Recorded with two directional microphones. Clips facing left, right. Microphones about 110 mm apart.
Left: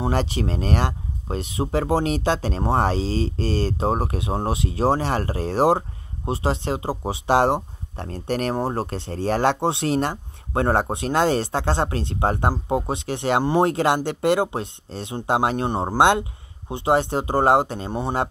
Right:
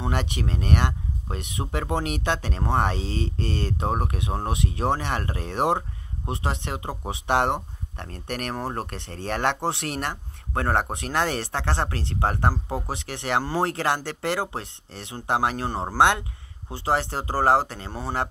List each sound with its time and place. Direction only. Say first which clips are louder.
0.0 s speech: left 5 dB; 35° left (ahead or behind)